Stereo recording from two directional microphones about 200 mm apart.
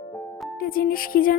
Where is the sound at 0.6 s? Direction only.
45° left (ahead or behind).